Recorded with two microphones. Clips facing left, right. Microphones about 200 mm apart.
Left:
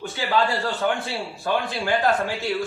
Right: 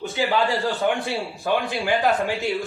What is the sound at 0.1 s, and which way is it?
A man's voice, 15° right (ahead or behind).